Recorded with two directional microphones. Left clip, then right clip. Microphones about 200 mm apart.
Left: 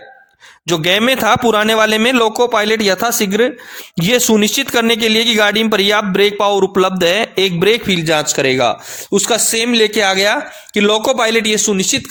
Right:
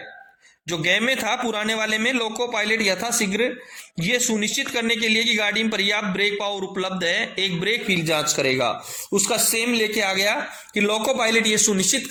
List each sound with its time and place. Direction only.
0.7 s a man's voice: 50° left (ahead or behind)